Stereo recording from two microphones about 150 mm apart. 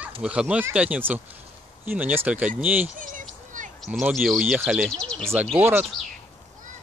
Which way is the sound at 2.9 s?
60° right (ahead or behind).